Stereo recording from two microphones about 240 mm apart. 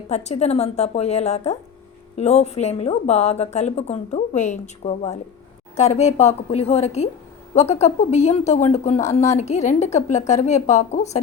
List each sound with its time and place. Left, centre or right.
0.1 s speech: left